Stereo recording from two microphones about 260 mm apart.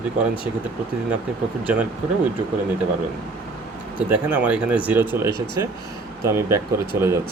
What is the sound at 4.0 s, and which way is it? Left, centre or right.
Speech, centre.